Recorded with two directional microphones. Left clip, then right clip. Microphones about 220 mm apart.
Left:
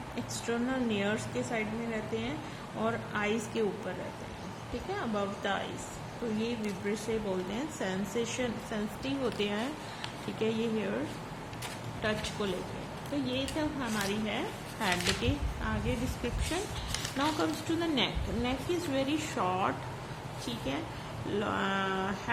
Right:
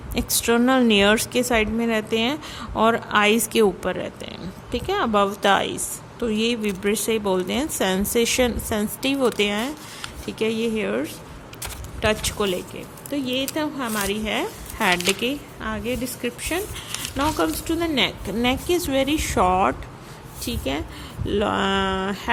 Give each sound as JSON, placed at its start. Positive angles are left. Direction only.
{"t": 0.2, "sound": "speech", "side_deg": -35}
{"t": 12.0, "sound": "speech", "side_deg": -30}
{"t": 18.7, "sound": "speech", "side_deg": -35}
{"t": 21.3, "sound": "speech", "side_deg": -30}